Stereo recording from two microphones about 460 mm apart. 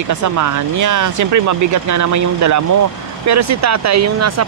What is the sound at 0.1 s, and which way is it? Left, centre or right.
Speech, right.